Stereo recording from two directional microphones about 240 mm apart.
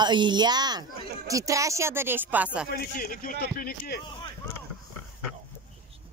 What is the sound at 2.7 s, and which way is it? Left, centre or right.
Speech, left.